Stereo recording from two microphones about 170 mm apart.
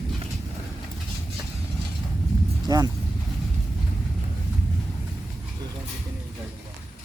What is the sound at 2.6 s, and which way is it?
Speech, 20° right (ahead or behind).